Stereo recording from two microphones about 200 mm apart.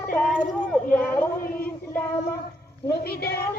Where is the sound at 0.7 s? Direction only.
10° left (ahead or behind).